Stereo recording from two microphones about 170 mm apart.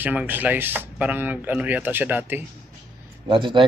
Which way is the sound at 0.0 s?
10° right (ahead or behind).